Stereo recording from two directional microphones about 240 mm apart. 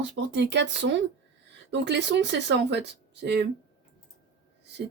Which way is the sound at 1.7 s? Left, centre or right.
Right.